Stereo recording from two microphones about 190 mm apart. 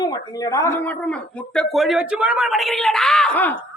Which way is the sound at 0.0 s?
20° left (ahead or behind).